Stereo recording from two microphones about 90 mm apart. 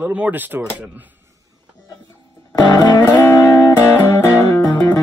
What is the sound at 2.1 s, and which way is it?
Music, 25° left (ahead or behind).